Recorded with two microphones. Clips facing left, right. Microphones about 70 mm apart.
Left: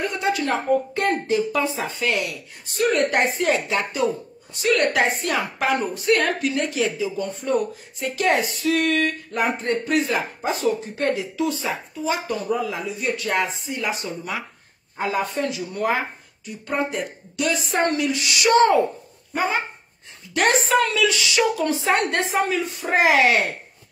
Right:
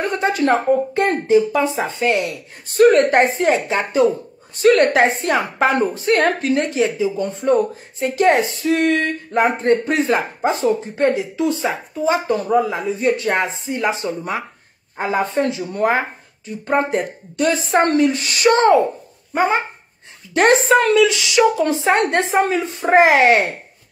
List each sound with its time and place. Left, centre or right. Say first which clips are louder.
0.0 s speech: right 5 dB; right
0.7 s a woman's voice: right 4 dB; right
2.7 s a woman's voice: right 8 dB; right
19.3 s a woman's voice: right 6 dB; right